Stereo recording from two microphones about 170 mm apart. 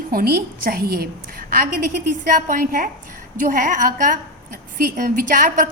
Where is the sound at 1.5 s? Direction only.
55° right (ahead or behind).